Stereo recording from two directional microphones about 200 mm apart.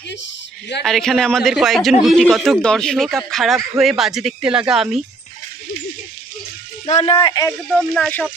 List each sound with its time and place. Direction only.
0.8 s speech: centre (ahead or behind)
7.0 s a man's voice: 25° left (ahead or behind)
7.7 s speech: centre (ahead or behind)